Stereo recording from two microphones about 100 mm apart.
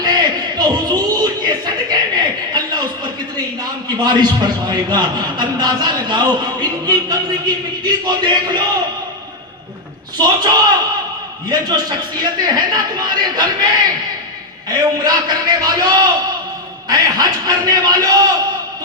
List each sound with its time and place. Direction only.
0.0 s a sound: 45° right (ahead or behind)
3.6 s a man's voice: 45° right (ahead or behind)
10.2 s a man's voice: 40° right (ahead or behind)
14.7 s a man's voice: 40° right (ahead or behind)